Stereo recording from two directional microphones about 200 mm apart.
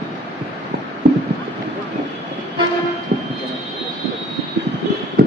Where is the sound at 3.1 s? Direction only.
55° right (ahead or behind).